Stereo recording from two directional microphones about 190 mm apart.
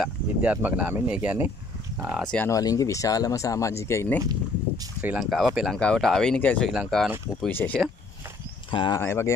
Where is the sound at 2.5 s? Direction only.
20° left (ahead or behind).